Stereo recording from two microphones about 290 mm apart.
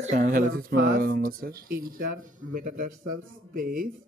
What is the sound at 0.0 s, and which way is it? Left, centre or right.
Speech, right.